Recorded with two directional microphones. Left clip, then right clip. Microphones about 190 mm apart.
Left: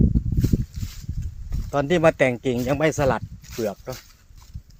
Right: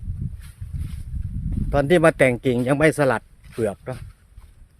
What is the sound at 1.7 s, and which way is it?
Speech, 30° right (ahead or behind).